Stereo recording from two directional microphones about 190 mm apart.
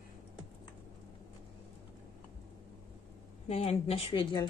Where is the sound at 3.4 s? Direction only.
30° left (ahead or behind).